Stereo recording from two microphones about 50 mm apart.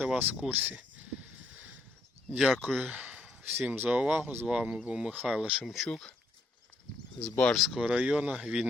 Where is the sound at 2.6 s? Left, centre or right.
Centre.